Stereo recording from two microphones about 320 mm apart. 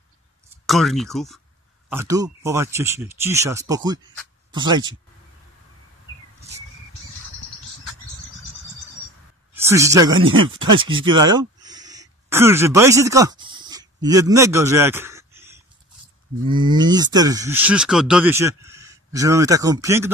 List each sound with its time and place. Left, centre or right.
0.7 s speech: centre
1.9 s speech: centre
9.5 s speech: centre
11.1 s a sound: centre
16.4 s speech: centre